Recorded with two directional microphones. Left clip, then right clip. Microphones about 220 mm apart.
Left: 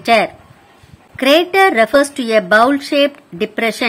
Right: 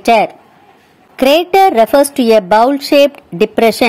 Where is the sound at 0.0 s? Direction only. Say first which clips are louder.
Right 3 dB; 15° right (ahead or behind).